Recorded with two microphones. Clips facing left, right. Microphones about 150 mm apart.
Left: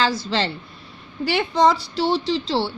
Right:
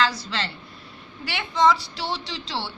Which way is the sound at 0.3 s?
35° left (ahead or behind).